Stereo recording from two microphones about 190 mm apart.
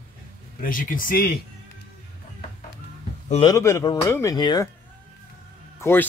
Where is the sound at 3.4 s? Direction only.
15° left (ahead or behind).